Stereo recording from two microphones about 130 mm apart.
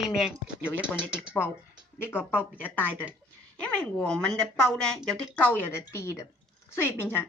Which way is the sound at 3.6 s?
10° left (ahead or behind).